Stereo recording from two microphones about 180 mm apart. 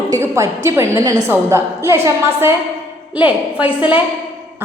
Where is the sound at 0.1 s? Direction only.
15° right (ahead or behind).